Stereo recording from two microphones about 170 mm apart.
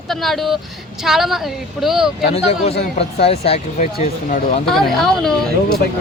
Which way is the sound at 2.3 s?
40° left (ahead or behind).